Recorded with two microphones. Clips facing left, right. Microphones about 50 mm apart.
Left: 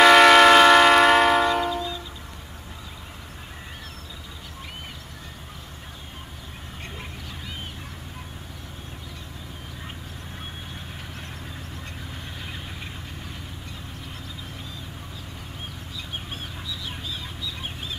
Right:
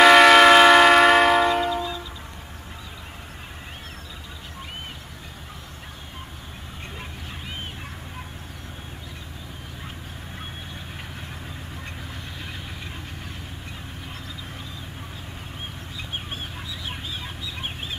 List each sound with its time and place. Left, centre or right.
0.0 s train: centre
16.8 s chicken: right